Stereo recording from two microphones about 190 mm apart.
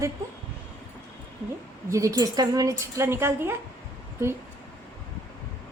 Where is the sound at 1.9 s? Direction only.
15° right (ahead or behind).